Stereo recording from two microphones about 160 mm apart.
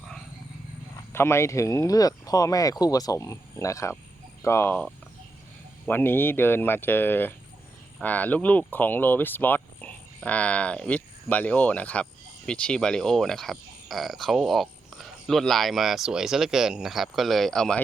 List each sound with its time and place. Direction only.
1.1 s speech: 15° left (ahead or behind)